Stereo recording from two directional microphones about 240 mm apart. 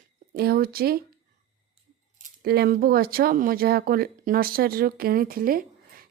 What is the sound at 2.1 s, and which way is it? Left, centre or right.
A woman's voice, right.